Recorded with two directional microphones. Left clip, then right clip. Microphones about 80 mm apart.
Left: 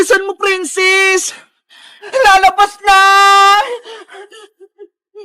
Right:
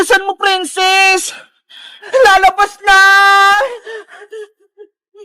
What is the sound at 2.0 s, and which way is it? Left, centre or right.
Chuckle, right.